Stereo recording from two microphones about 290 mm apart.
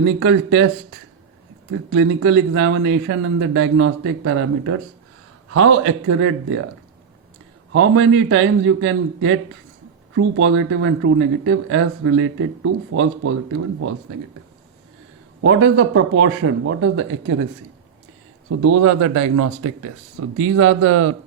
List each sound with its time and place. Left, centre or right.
0.0 s speech: right
1.9 s speech: right
7.7 s speech: right
15.4 s speech: right
18.4 s speech: right